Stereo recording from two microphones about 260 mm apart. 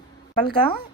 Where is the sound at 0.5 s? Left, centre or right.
Centre.